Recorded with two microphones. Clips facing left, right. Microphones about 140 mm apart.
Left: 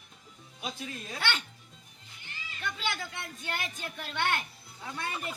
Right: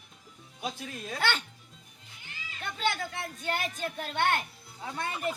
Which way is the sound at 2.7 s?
45° right (ahead or behind).